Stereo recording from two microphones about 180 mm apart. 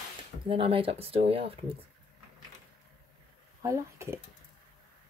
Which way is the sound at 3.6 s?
15° right (ahead or behind).